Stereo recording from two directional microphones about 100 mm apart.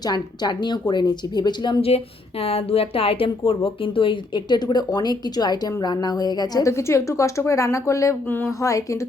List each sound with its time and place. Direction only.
0.1 s a woman's voice: 45° left (ahead or behind)
2.4 s a woman's voice: 80° left; by 8.5 s 20° left (ahead or behind)
8.6 s speech: 35° left (ahead or behind)